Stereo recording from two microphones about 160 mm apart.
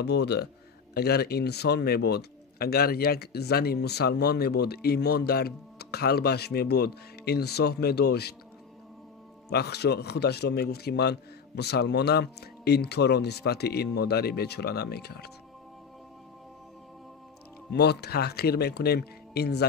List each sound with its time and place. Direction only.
0.0 s a man's voice: 90° left
9.5 s a man's voice: 90° left
17.7 s a man's voice: 90° left